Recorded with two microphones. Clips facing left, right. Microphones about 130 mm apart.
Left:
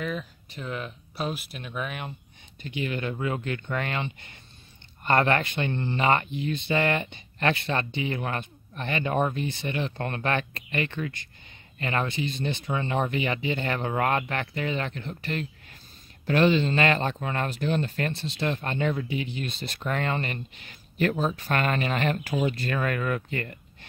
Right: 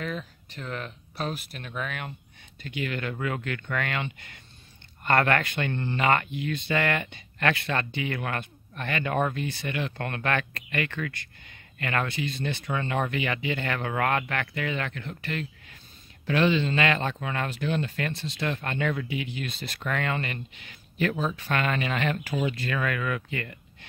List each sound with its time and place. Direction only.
0.0 s speech: 10° left (ahead or behind); by 23.9 s 40° left (ahead or behind)